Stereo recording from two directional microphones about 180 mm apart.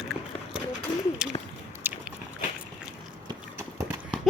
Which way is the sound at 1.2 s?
5° right (ahead or behind).